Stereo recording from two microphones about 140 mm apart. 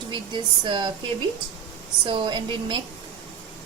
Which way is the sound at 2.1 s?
35° right (ahead or behind).